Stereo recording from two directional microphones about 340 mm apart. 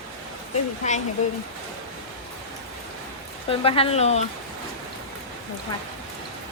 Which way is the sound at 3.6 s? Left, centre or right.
Centre.